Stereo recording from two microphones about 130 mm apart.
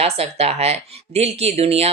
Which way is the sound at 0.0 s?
50° right (ahead or behind).